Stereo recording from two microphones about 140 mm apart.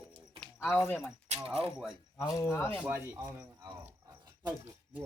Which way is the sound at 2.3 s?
15° left (ahead or behind).